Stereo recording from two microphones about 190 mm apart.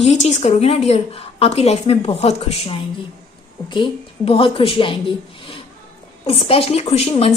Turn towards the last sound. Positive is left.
turn(degrees=35)  # may be behind; listen again after turning